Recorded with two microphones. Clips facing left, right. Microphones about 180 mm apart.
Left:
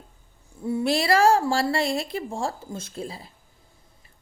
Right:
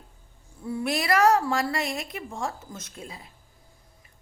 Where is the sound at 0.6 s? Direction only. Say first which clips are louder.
Left 5 dB; 25° left (ahead or behind).